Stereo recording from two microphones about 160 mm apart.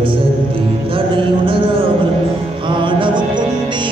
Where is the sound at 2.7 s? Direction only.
30° right (ahead or behind).